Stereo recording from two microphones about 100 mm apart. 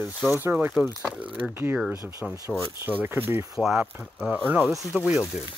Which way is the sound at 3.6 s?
5° right (ahead or behind).